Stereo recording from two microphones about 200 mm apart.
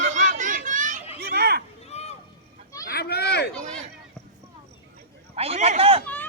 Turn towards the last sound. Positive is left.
turn(degrees=-30)  # may be behind; listen again after turning